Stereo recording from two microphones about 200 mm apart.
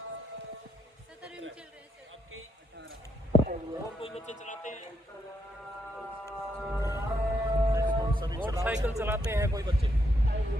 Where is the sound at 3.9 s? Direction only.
30° left (ahead or behind).